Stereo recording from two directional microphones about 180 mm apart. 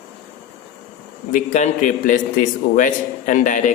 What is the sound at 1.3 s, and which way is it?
A man's voice, 40° left (ahead or behind).